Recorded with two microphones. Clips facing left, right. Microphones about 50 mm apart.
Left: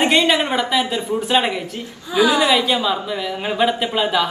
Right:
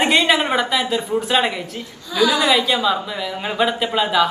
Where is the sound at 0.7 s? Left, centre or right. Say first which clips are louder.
Left 1 dB; centre.